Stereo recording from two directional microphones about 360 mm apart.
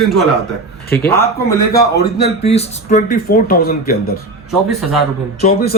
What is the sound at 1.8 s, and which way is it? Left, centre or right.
Speech, left.